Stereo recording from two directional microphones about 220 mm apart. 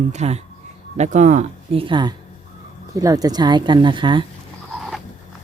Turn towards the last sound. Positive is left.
turn(degrees=-20)  # may be behind; listen again after turning